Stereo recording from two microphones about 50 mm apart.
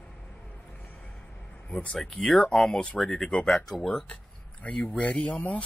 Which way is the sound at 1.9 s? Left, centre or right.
Centre.